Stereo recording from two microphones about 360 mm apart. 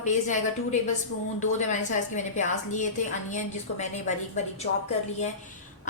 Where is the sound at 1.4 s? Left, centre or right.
Centre.